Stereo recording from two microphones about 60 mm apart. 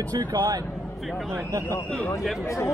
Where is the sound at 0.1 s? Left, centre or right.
Right.